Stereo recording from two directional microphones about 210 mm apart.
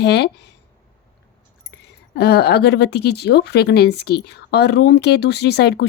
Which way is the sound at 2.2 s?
50° left (ahead or behind).